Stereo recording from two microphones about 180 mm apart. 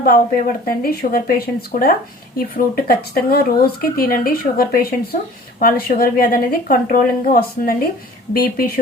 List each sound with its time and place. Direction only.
0.0 s a woman's voice: 50° left (ahead or behind)